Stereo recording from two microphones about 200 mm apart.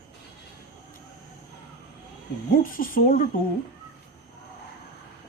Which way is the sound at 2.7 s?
45° left (ahead or behind).